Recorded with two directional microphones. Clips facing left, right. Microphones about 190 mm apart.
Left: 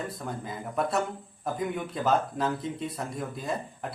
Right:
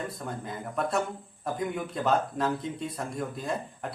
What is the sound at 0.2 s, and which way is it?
Speech, centre (ahead or behind).